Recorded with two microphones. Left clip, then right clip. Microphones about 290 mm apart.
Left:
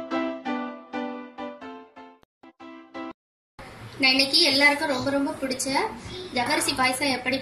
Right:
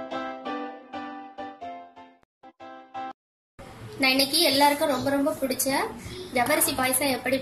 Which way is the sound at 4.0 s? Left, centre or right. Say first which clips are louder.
Left 2 dB; right.